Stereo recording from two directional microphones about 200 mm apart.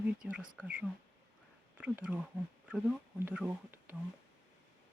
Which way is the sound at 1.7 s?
5° right (ahead or behind).